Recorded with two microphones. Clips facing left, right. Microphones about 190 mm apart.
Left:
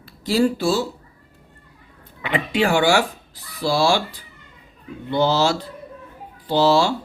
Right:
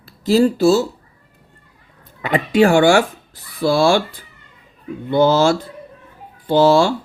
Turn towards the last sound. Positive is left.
turn(degrees=-50)  # may be behind; listen again after turning